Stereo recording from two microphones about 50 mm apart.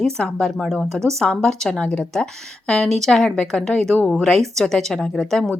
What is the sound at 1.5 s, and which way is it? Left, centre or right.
Speech, centre.